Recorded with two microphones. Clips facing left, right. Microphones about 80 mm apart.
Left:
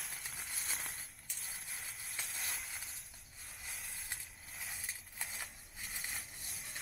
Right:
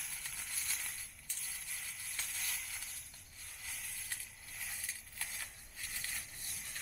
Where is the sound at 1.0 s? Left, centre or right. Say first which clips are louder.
Left 1 dB; left.